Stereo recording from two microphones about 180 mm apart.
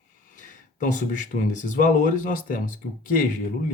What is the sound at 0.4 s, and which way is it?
Speech, 45° left (ahead or behind).